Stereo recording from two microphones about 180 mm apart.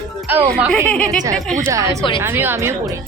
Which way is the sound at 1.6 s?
15° right (ahead or behind).